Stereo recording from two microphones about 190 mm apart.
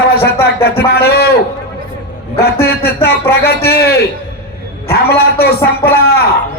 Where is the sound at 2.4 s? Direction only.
55° left (ahead or behind).